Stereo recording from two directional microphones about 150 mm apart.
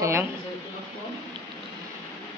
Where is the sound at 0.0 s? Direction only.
20° right (ahead or behind).